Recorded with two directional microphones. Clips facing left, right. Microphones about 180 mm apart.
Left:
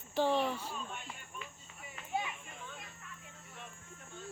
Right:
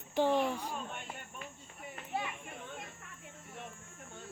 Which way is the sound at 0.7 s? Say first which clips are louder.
Right 2 dB; 60° right (ahead or behind).